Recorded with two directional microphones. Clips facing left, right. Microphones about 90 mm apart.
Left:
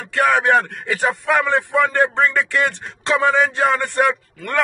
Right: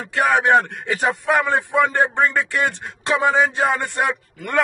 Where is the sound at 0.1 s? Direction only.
15° right (ahead or behind).